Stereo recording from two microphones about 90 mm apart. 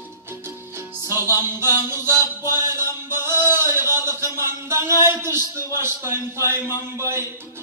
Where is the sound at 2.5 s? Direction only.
25° right (ahead or behind).